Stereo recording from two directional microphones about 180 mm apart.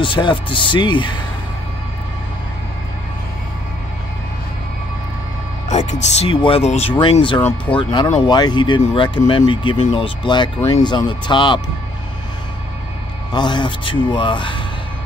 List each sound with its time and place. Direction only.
0.0 s a man's voice: 25° left (ahead or behind)
5.7 s a man's voice: 40° left (ahead or behind)
9.8 s speech: 40° left (ahead or behind)
10.0 s a man's voice: 25° left (ahead or behind)
13.3 s a man's voice: 25° left (ahead or behind)